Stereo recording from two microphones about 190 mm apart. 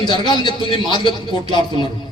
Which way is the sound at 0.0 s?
25° left (ahead or behind).